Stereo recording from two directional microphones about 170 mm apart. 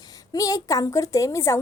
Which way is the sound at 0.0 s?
20° left (ahead or behind).